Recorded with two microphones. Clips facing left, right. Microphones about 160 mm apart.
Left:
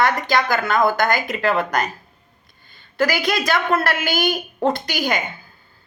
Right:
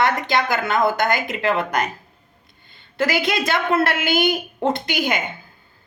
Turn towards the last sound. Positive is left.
turn(degrees=-20)  # may be behind; listen again after turning